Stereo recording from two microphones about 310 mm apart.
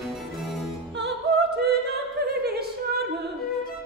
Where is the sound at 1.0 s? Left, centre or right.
Right.